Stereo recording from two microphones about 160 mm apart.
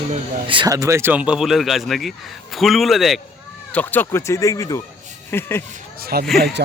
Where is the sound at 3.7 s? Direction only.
10° left (ahead or behind).